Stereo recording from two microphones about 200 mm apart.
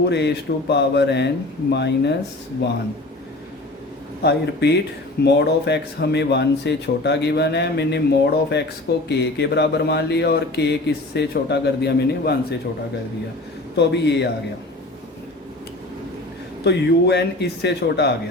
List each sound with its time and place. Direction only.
0.1 s speech: 60° left (ahead or behind)
4.2 s speech: 55° left (ahead or behind)
13.7 s speech: 60° left (ahead or behind)
16.6 s speech: 55° left (ahead or behind)